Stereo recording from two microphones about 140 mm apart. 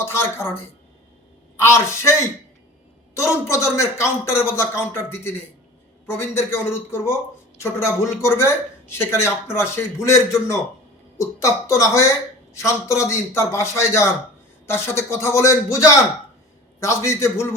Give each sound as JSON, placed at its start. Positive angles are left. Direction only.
{"t": 0.0, "sound": "speech", "side_deg": 15}
{"t": 1.6, "sound": "speech", "side_deg": 20}
{"t": 3.2, "sound": "speech", "side_deg": 20}